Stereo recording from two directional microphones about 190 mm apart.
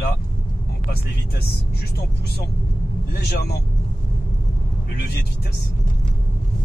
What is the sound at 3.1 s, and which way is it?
Speech, 60° left (ahead or behind).